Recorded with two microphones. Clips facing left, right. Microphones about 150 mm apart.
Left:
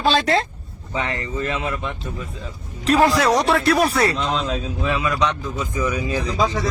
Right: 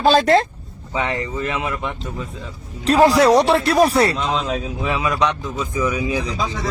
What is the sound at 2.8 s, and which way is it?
Speech, 35° right (ahead or behind).